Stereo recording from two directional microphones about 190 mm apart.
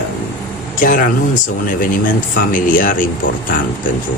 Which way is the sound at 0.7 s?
45° left (ahead or behind).